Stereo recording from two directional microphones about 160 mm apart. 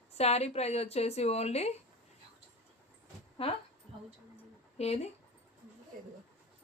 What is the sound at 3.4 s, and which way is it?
Speech, 35° left (ahead or behind).